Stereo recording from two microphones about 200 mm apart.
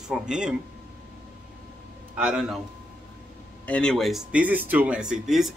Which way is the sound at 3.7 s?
5° left (ahead or behind).